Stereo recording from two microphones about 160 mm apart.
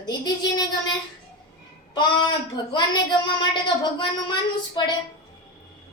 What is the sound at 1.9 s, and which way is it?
A woman's voice, 30° left (ahead or behind).